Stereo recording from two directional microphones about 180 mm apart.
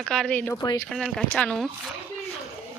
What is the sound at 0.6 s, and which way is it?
Speech, 25° left (ahead or behind).